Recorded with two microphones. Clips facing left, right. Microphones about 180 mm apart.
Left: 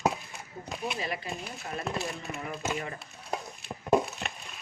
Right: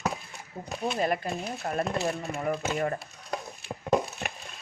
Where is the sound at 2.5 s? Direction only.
50° right (ahead or behind).